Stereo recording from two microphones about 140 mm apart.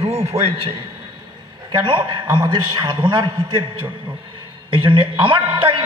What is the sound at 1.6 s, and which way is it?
A man's voice, 35° right (ahead or behind).